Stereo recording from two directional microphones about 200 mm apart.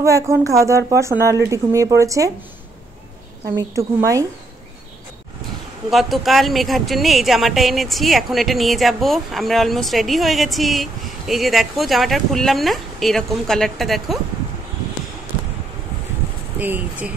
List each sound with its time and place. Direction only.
0.0 s a woman's voice: 15° right (ahead or behind)
3.4 s a woman's voice: 15° right (ahead or behind)
5.9 s speech: centre (ahead or behind)
16.5 s a woman's voice: 10° right (ahead or behind)